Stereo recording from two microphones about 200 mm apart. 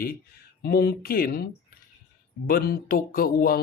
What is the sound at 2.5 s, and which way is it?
Speech, 45° left (ahead or behind).